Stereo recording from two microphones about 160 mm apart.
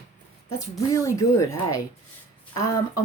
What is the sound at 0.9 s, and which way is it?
Speech, 20° left (ahead or behind).